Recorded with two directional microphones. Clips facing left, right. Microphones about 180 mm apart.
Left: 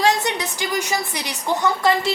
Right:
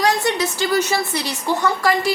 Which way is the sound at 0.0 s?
20° left (ahead or behind).